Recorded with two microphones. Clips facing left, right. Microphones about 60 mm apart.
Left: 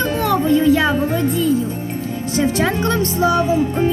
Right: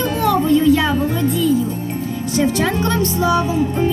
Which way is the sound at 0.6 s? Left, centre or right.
Centre.